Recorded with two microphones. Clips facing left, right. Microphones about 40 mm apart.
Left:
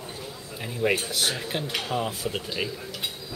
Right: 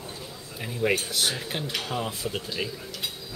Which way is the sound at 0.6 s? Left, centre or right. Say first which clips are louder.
Left 1 dB; centre.